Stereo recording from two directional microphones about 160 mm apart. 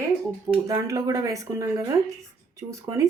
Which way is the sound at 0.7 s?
20° right (ahead or behind).